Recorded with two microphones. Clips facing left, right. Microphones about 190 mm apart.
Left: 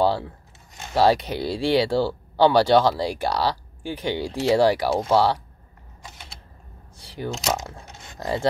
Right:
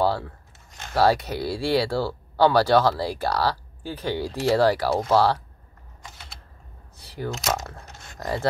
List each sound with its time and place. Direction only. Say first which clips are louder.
0.0 s speech: left 2 dB; 20° left (ahead or behind)
7.2 s speech: left 1 dB; 25° left (ahead or behind)